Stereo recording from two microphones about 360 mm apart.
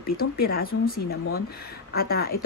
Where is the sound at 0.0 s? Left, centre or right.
Left.